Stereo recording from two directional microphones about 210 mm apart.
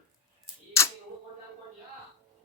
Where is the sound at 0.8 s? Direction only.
15° left (ahead or behind).